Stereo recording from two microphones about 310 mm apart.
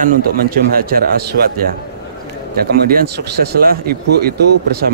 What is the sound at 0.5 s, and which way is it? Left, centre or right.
Speech, right.